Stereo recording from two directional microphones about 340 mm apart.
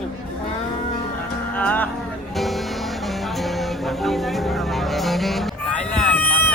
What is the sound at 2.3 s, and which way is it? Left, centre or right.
Music, centre.